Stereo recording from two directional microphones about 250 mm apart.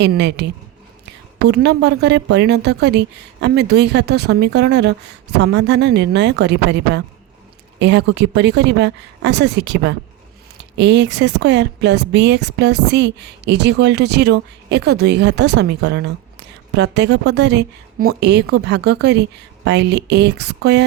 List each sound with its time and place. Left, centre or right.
0.0 s speech: right